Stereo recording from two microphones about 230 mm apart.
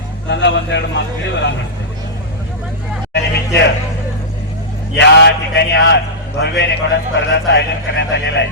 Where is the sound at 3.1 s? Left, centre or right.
Left.